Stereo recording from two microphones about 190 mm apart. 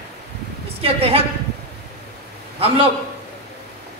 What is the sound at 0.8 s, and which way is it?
Speech, 30° right (ahead or behind).